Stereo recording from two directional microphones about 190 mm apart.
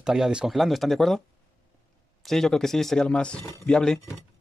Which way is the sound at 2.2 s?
Centre (ahead or behind).